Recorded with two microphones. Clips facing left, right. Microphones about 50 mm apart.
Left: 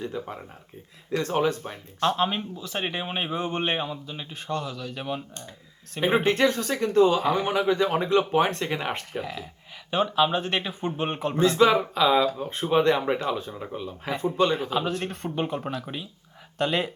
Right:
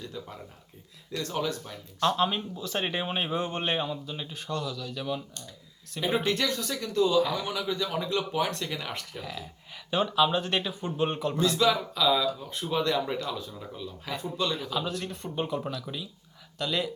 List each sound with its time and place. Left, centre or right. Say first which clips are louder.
0.0 s speech: left 7 dB; left
2.8 s speech: left 2 dB; centre
3.3 s speech: left 4 dB; left
4.4 s speech: left 3 dB; left
10.3 s speech: left 2 dB; left